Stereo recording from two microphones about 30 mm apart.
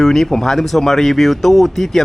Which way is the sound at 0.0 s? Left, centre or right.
Centre.